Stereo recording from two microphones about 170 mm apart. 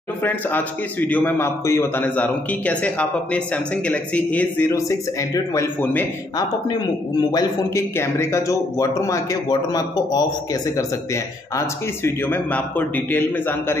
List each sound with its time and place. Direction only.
0.2 s a man's voice: 10° left (ahead or behind)